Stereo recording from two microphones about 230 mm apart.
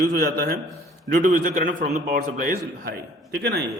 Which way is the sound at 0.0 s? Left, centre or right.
Right.